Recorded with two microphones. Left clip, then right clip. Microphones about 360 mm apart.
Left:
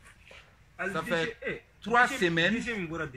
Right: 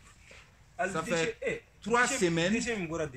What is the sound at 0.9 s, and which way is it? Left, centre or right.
A man's voice, centre.